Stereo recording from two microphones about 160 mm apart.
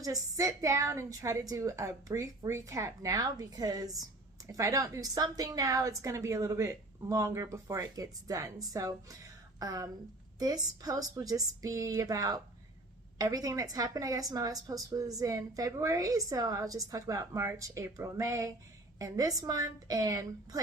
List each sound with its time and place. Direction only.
0.0 s a woman's voice: 20° right (ahead or behind)